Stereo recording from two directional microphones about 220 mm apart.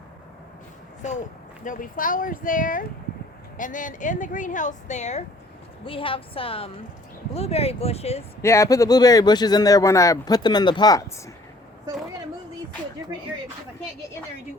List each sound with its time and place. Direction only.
1.6 s a woman's voice: 35° left (ahead or behind)
8.4 s a man's voice: 15° left (ahead or behind)